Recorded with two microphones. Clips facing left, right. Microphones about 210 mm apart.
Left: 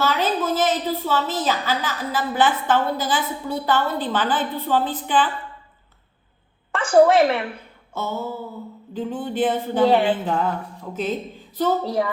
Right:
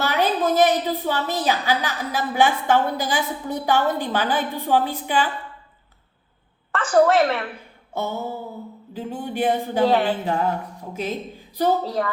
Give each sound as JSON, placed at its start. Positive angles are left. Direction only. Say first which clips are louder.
{"t": 0.0, "sound": "a woman's voice", "louder": "right 1 dB", "side_deg": -15}
{"t": 6.7, "sound": "a woman's voice", "louder": "left 2 dB", "side_deg": 15}
{"t": 7.9, "sound": "a woman's voice", "louder": "even", "side_deg": -15}
{"t": 9.8, "sound": "a woman's voice", "louder": "left 2 dB", "side_deg": 15}
{"t": 10.9, "sound": "a woman's voice", "louder": "left 2 dB", "side_deg": -10}
{"t": 11.8, "sound": "a woman's voice", "louder": "left 2 dB", "side_deg": 15}